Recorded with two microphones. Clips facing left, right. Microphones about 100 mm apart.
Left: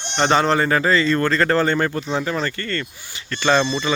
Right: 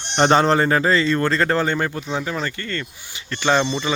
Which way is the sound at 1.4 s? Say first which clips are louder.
Left 2 dB; 15° right (ahead or behind).